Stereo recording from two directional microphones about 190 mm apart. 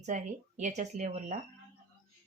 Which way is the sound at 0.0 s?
40° right (ahead or behind).